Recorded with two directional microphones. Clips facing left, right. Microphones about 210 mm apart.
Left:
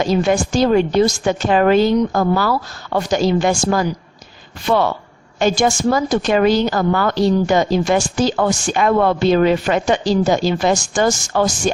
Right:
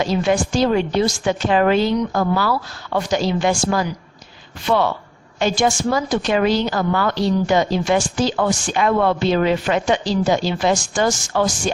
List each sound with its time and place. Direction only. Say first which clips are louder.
0.0 s a woman's voice: left 2 dB; 45° left (ahead or behind)
5.4 s a woman's voice: left 3 dB; 45° left (ahead or behind)